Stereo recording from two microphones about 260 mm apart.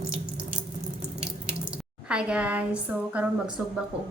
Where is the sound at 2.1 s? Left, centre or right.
Centre.